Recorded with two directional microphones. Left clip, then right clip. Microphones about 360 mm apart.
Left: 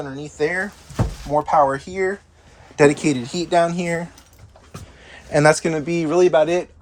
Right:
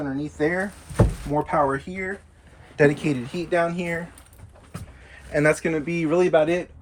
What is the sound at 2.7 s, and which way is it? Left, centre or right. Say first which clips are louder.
Speech: left 4 dB; centre.